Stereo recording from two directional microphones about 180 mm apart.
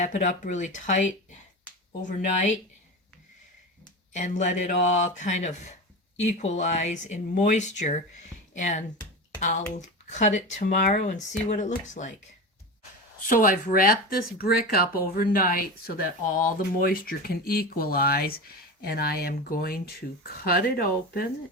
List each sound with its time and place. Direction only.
0.0 s speech: 45° left (ahead or behind)
4.1 s speech: 40° left (ahead or behind)
13.2 s speech: 50° left (ahead or behind)